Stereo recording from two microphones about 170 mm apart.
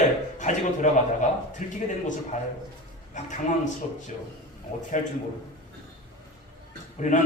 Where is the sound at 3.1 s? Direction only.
45° left (ahead or behind).